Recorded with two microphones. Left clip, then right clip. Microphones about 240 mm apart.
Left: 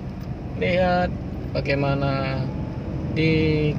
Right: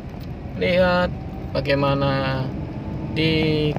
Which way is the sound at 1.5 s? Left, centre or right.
Right.